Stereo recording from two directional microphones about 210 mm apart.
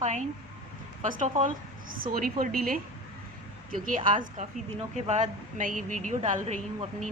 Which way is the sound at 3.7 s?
40° right (ahead or behind).